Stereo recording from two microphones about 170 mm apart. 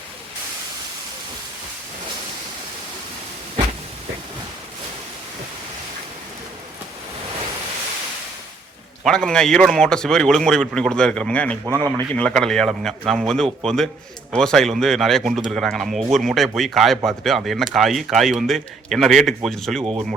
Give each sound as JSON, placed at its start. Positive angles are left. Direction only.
{"t": 9.0, "sound": "a man's voice", "side_deg": 5}
{"t": 19.8, "sound": "speech", "side_deg": -30}